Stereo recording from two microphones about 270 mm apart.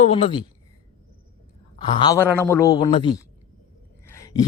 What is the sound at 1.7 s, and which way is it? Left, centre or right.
Speech, centre.